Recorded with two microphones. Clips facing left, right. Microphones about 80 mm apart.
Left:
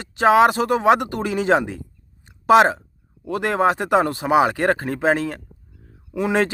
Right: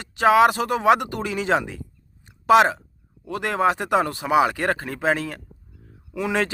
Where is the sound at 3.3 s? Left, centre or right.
Left.